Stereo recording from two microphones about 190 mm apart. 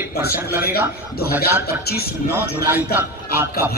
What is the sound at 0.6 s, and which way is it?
Speech, 55° left (ahead or behind).